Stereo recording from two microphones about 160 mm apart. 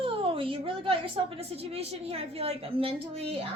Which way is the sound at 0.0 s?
35° right (ahead or behind).